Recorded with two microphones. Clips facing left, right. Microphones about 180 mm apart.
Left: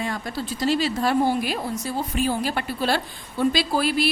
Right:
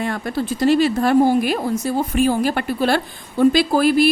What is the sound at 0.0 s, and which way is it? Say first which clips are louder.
Speech: right 6 dB; 55° right (ahead or behind).